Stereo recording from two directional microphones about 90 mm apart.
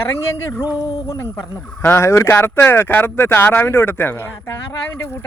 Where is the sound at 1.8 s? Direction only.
30° left (ahead or behind).